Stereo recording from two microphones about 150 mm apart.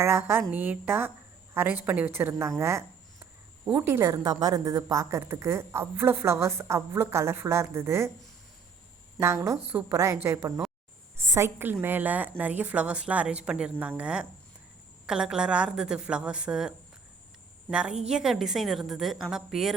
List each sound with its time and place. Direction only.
0.0 s a woman's voice: 15° right (ahead or behind)
9.2 s a woman's voice: 20° right (ahead or behind); by 19.7 s centre (ahead or behind)